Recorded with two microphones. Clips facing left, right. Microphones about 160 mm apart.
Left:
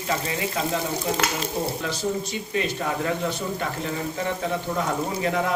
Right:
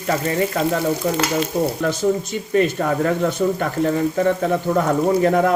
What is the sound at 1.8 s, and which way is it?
Frying, 55° right (ahead or behind).